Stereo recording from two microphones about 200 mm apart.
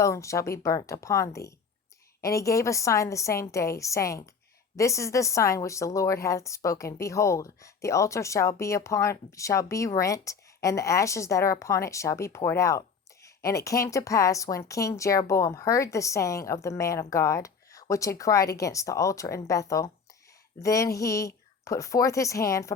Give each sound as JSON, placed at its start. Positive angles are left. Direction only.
{"t": 0.0, "sound": "a woman's voice", "side_deg": 15}